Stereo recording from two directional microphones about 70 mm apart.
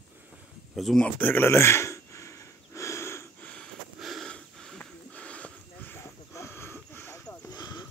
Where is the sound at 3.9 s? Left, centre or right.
Centre.